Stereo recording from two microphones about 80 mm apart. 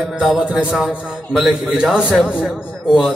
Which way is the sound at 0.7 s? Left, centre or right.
Centre.